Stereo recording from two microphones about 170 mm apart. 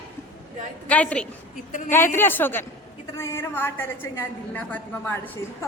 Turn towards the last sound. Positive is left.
turn(degrees=10)  # may be behind; listen again after turning